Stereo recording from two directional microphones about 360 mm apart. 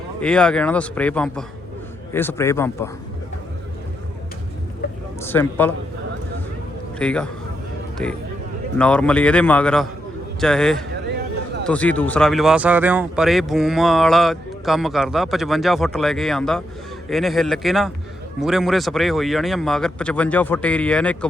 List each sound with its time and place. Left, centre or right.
0.2 s speech: centre
5.2 s speech: centre
7.0 s speech: centre